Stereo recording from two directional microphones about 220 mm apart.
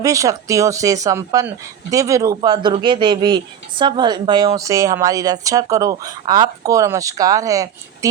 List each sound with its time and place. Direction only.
0.0 s speech: 15° right (ahead or behind)